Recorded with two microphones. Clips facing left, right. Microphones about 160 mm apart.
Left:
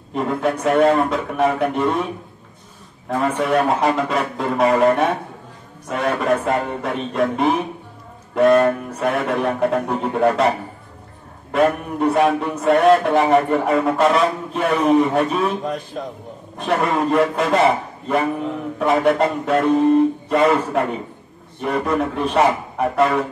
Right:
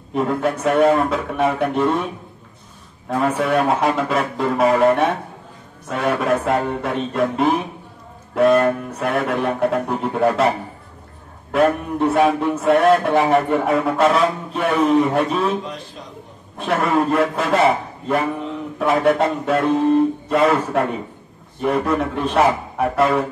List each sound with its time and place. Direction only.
0.1 s a man's voice: centre (ahead or behind)
3.1 s a man's voice: 5° right (ahead or behind)
11.5 s a man's voice: centre (ahead or behind)
15.6 s a man's voice: 50° left (ahead or behind)
16.5 s a man's voice: centre (ahead or behind)